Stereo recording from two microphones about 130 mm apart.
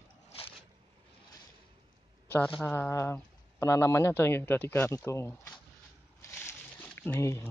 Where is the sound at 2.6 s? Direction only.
15° left (ahead or behind).